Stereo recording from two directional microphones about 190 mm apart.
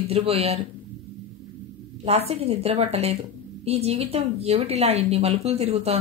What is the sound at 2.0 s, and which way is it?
Speech, 35° right (ahead or behind).